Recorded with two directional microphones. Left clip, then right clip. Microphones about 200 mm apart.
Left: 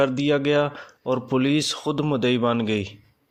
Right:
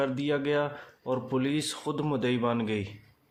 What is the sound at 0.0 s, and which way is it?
Speech, 30° left (ahead or behind).